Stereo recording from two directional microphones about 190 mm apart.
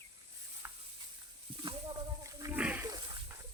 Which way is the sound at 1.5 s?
25° right (ahead or behind).